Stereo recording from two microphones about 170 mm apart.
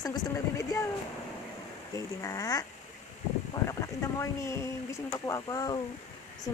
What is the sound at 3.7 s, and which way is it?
A woman's voice, 20° left (ahead or behind).